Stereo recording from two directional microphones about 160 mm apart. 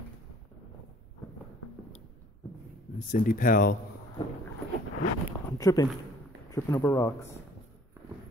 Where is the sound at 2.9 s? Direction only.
60° left (ahead or behind).